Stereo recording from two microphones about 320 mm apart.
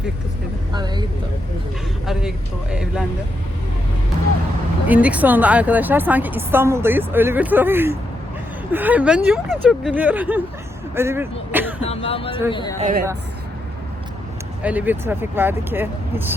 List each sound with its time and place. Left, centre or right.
0.7 s speech: centre
2.0 s a woman's voice: centre
4.9 s a woman's voice: centre
11.8 s a sound: centre
12.5 s speech: centre
12.8 s a woman's voice: right
14.6 s speech: centre